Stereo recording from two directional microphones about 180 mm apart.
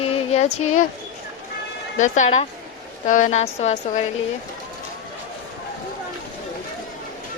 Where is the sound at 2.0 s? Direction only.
40° left (ahead or behind).